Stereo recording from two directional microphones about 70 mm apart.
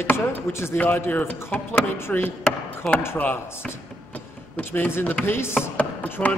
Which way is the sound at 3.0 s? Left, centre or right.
Left.